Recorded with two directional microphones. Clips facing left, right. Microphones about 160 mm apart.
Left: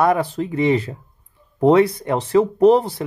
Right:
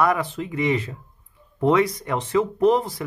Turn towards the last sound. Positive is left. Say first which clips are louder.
# left 5 dB
turn(degrees=30)  # may be behind; listen again after turning